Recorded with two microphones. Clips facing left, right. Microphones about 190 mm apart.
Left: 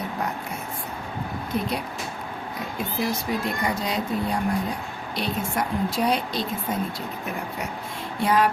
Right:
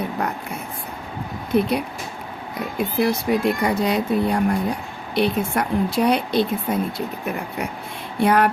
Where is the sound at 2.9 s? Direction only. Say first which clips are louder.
Right 7 dB; 65° right (ahead or behind).